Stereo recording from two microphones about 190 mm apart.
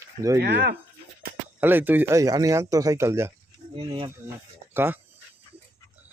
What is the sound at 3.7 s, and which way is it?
Speech, 25° right (ahead or behind).